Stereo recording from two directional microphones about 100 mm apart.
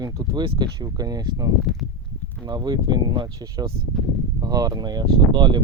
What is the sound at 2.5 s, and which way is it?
Speech, 40° right (ahead or behind).